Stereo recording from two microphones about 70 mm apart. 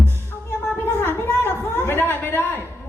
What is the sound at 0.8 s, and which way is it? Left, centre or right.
A woman's voice, left.